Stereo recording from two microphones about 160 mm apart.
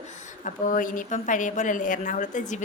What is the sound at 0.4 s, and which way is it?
A woman's voice, 55° left (ahead or behind).